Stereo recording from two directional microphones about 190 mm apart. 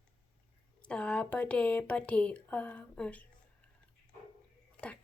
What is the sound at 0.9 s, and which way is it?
Speech, 5° left (ahead or behind).